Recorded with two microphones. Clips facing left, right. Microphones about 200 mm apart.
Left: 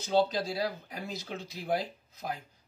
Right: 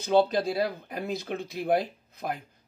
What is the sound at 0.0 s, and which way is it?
Speech, 60° right (ahead or behind).